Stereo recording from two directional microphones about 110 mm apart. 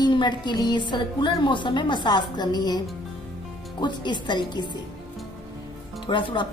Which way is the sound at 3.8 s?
40° left (ahead or behind).